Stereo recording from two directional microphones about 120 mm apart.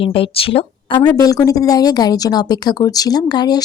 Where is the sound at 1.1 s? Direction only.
30° left (ahead or behind).